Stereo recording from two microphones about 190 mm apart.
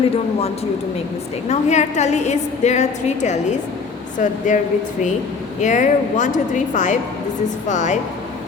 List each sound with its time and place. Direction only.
1.5 s a woman's voice: 35° left (ahead or behind)